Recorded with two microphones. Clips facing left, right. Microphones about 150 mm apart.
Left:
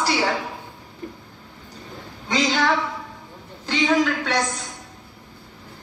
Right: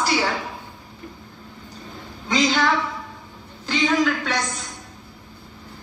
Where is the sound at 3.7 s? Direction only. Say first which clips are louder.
Even; 20° left (ahead or behind).